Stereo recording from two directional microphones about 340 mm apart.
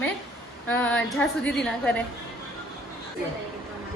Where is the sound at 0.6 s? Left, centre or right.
Centre.